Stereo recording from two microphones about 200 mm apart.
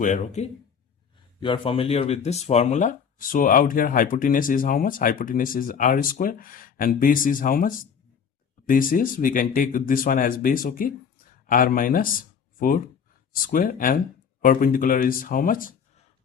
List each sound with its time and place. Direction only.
0.0 s speech: 35° left (ahead or behind)